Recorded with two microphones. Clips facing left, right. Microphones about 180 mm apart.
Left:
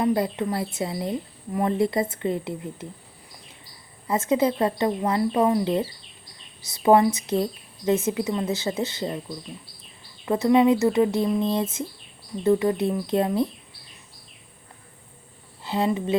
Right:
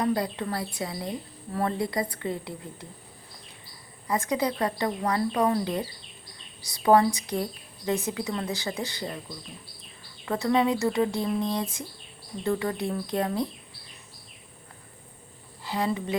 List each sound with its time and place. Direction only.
0.0 s speech: 20° left (ahead or behind)
4.0 s speech: 25° left (ahead or behind)
10.2 s speech: 20° left (ahead or behind)
15.6 s speech: 20° left (ahead or behind)